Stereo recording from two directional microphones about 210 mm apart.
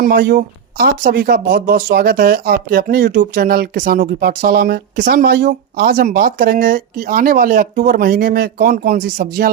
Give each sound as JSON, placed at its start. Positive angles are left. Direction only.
{"t": 0.0, "sound": "speech", "side_deg": -45}